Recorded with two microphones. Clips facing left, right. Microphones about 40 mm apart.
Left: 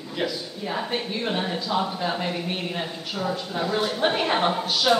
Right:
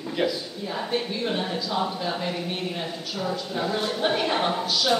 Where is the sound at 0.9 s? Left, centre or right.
Left.